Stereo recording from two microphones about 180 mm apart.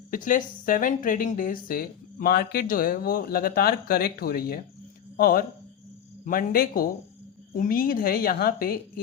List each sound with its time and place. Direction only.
0.1 s a woman's voice: 50° left (ahead or behind)